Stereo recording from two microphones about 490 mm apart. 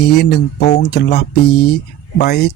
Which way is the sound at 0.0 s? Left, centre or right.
Centre.